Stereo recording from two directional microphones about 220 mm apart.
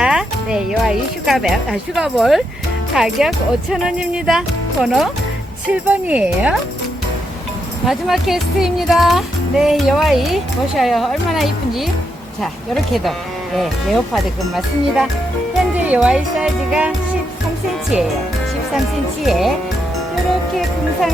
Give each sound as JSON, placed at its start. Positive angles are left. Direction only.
{"t": 0.0, "sound": "music", "side_deg": -5}
{"t": 2.0, "sound": "speech", "side_deg": 0}
{"t": 7.9, "sound": "speech", "side_deg": 0}
{"t": 19.2, "sound": "speech", "side_deg": 0}